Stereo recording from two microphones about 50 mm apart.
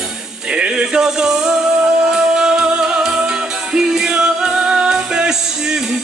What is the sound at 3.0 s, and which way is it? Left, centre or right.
Music, centre.